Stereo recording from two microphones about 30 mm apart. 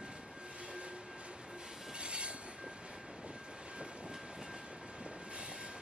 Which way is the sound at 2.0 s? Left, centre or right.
Right.